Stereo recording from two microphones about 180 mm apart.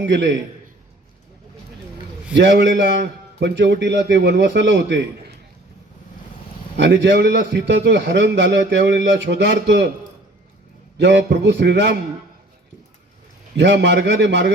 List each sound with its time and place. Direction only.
0.0 s a man's voice: 75° right (ahead or behind)
2.3 s a man's voice: 75° right (ahead or behind)
6.7 s a man's voice: 75° right (ahead or behind)
10.9 s a man's voice: 75° right (ahead or behind)
13.6 s a man's voice: 75° right (ahead or behind)